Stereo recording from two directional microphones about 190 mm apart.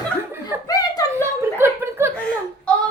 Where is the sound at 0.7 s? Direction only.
20° left (ahead or behind).